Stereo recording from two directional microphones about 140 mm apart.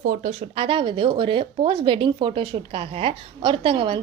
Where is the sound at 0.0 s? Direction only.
70° right (ahead or behind).